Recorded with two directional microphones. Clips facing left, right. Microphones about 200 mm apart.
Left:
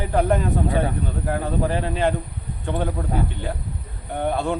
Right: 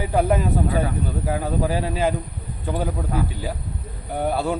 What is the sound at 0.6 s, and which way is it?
Speech, 25° left (ahead or behind).